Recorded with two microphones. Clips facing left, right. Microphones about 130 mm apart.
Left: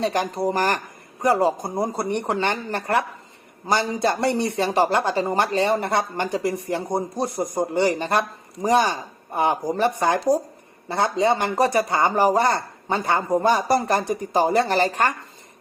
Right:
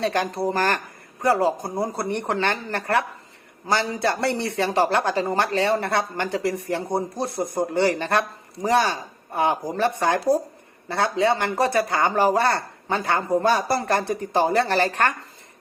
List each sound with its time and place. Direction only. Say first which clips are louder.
0.0 s speech: left 1 dB; 15° left (ahead or behind)